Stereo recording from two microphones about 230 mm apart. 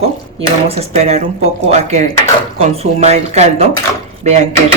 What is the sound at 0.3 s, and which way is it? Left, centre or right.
Speech, right.